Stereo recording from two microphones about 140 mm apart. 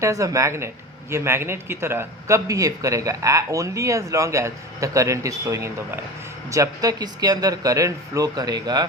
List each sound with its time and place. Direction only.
0.0 s a man's voice: 25° right (ahead or behind)